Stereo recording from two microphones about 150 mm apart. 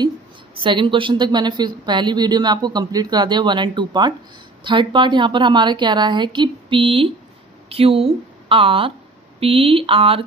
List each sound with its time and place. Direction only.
0.7 s a woman's voice: 35° right (ahead or behind)